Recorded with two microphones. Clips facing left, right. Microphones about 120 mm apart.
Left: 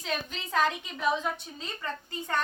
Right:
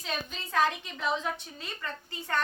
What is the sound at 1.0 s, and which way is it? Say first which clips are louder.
A woman's voice: left 3 dB; 10° left (ahead or behind).